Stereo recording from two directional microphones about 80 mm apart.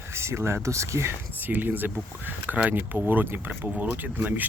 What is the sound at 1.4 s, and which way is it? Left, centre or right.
Speech, right.